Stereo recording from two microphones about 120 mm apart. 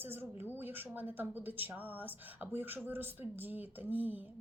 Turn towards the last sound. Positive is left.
turn(degrees=-15)  # may be behind; listen again after turning